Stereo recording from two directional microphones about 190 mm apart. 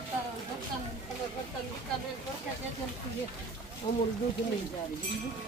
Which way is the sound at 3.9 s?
35° left (ahead or behind).